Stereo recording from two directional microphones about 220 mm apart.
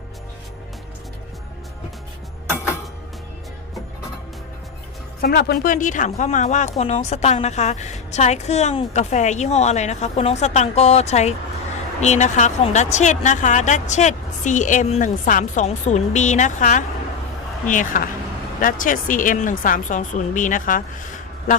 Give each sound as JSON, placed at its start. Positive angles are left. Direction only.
{"t": 5.2, "sound": "speech", "side_deg": 50}